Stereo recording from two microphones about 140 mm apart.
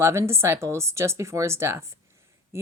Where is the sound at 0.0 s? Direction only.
20° right (ahead or behind).